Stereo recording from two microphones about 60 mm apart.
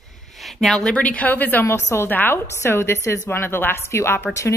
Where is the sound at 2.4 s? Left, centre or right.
Left.